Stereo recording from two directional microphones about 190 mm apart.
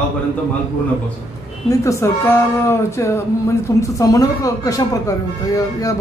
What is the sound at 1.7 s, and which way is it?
Speech, 15° left (ahead or behind).